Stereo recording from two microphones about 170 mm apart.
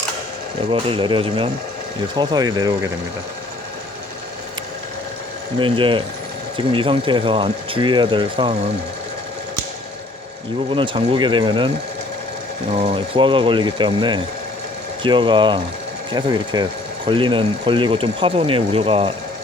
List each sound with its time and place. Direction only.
0.7 s speech: 30° right (ahead or behind)
5.5 s speech: 30° right (ahead or behind)
10.7 s speech: 30° right (ahead or behind)
12.7 s speech: 35° right (ahead or behind)